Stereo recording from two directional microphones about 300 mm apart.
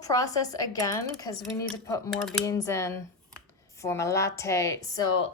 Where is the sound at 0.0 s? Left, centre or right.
Centre.